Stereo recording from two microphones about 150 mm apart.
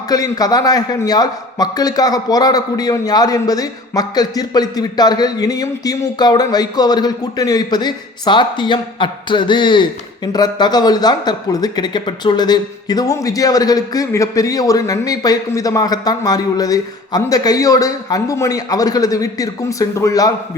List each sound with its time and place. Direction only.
0.1 s speech: 25° left (ahead or behind)